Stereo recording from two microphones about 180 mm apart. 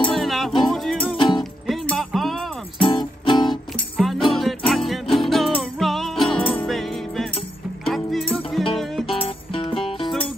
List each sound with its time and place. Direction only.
0.1 s music: centre (ahead or behind)
1.1 s music: 25° left (ahead or behind)
1.4 s music: centre (ahead or behind)
2.8 s music: 25° left (ahead or behind)
3.9 s music: centre (ahead or behind)
9.1 s music: 30° left (ahead or behind)